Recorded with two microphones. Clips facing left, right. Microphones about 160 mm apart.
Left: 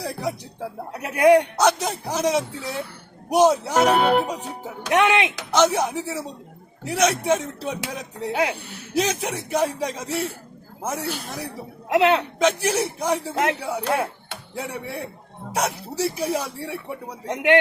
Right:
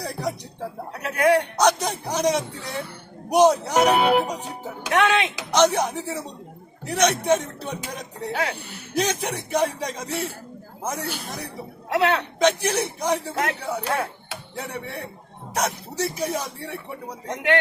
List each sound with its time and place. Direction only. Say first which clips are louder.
0.0 s speech: left 1 dB; 5° left (ahead or behind)
0.9 s speech: left 4 dB; 20° left (ahead or behind)
1.5 s speech: even; 5° left (ahead or behind)
4.9 s speech: left 2 dB; 20° left (ahead or behind)
5.5 s speech: right 1 dB; 5° left (ahead or behind)
11.9 s a man's voice: left 3 dB; 20° left (ahead or behind)
12.4 s speech: even; 5° left (ahead or behind)
13.3 s a man's voice: left 3 dB; 20° left (ahead or behind)
14.5 s speech: left 2 dB; 5° left (ahead or behind)
17.2 s a man's voice: left 4 dB; 20° left (ahead or behind)